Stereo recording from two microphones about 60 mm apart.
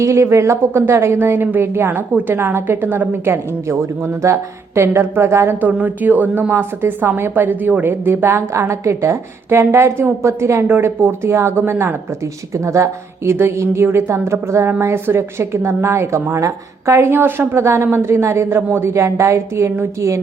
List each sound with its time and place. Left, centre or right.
0.0 s a woman's voice: right
5.5 s a woman's voice: right
10.7 s a woman's voice: right
12.5 s a woman's voice: right
13.3 s a woman's voice: right